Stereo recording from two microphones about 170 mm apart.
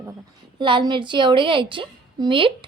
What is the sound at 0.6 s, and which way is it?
A woman's voice, 30° right (ahead or behind).